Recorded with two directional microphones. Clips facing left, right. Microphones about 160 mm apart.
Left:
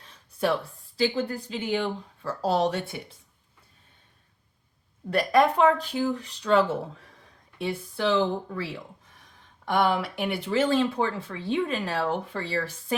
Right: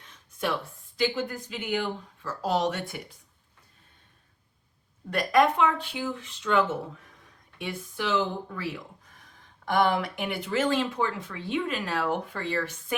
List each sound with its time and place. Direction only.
0.0 s a sound: 35° left (ahead or behind)
0.9 s speech: 30° left (ahead or behind)
5.1 s speech: 35° left (ahead or behind)
9.9 s speech: 30° left (ahead or behind)